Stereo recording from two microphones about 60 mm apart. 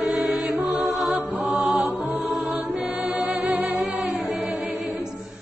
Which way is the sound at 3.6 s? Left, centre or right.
Centre.